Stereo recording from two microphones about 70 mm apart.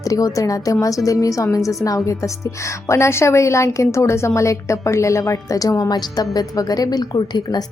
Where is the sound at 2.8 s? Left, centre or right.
Left.